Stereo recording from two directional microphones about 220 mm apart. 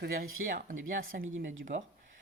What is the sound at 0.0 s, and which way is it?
Speech, 45° right (ahead or behind).